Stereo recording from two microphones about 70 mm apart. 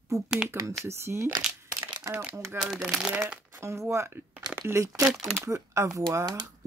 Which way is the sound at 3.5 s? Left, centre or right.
Right.